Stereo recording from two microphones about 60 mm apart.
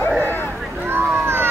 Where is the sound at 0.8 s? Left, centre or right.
Right.